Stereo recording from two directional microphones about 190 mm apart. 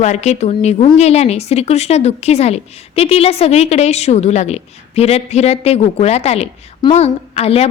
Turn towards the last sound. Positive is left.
turn(degrees=35)  # may be behind; listen again after turning